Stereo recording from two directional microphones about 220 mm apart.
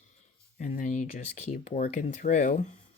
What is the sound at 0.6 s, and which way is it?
Speech, 35° left (ahead or behind).